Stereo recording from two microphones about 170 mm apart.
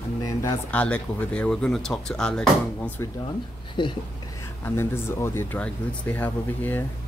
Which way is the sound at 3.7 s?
30° left (ahead or behind).